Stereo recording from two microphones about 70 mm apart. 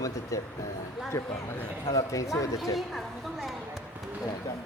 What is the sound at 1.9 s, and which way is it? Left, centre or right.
Speech, left.